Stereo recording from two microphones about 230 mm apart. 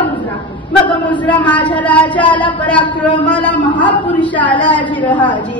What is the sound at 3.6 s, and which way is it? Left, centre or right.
Speech, left.